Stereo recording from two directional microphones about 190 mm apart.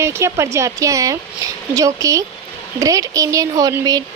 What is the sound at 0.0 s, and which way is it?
Speech, 15° right (ahead or behind).